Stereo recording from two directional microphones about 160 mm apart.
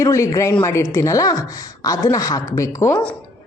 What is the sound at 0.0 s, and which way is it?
A woman's voice, 20° left (ahead or behind).